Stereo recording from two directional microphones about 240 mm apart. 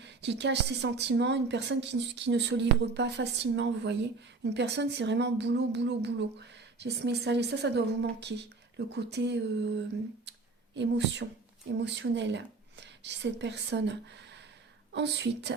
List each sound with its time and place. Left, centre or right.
0.0 s speech: right
10.8 s speech: right
14.9 s speech: right